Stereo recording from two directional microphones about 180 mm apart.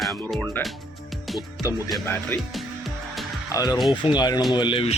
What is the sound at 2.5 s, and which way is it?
Music, centre (ahead or behind).